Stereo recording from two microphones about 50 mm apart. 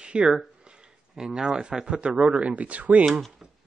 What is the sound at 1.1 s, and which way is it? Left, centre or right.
Speech, centre.